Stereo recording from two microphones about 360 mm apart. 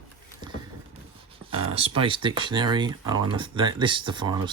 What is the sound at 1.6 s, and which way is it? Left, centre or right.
Speech, centre.